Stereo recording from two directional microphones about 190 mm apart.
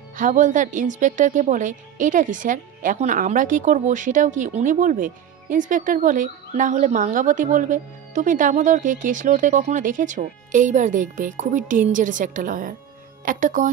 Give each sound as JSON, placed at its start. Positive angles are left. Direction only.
{"t": 0.1, "sound": "a woman's voice", "side_deg": -40}